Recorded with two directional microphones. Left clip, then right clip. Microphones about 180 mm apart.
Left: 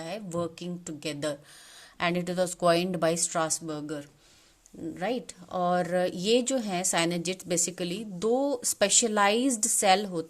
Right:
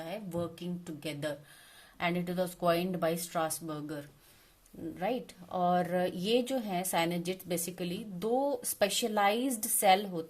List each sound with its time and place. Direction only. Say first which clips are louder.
0.0 s a woman's voice: left 4 dB; 35° left (ahead or behind)